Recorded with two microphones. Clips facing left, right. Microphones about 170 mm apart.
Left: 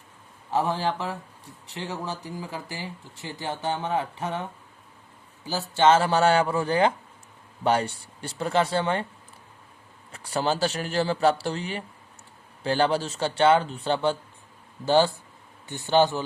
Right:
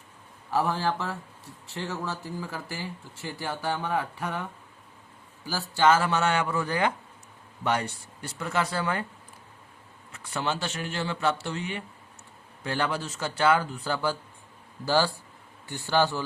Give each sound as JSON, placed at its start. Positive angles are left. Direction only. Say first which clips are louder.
{"t": 0.5, "sound": "speech", "louder": "left 1 dB", "side_deg": 20}
{"t": 5.5, "sound": "speech", "louder": "left 3 dB", "side_deg": 20}
{"t": 10.1, "sound": "a man's voice", "louder": "left 5 dB", "side_deg": 35}